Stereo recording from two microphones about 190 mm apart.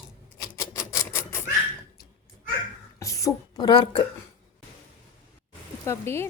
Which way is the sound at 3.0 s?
15° left (ahead or behind).